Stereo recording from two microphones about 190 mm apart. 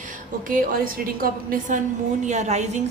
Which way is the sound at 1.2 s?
45° right (ahead or behind).